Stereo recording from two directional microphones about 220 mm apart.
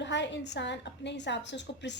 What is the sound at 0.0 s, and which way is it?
A woman's voice, 55° left (ahead or behind).